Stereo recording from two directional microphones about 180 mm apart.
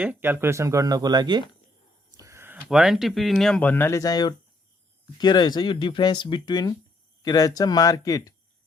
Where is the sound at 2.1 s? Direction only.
15° right (ahead or behind).